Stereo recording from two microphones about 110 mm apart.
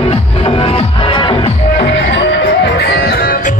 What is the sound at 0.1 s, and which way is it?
Music, 55° left (ahead or behind).